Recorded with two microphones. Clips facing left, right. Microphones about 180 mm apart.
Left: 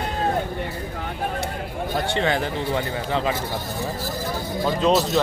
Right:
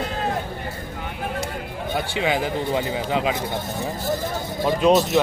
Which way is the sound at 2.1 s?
10° right (ahead or behind).